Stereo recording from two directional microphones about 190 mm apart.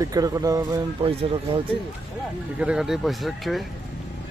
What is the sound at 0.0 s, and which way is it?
Speech, 20° right (ahead or behind).